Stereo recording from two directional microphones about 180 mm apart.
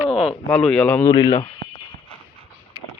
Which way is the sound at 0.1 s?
Centre (ahead or behind).